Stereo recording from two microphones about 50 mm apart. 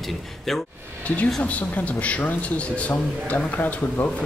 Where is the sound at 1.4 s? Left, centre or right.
Left.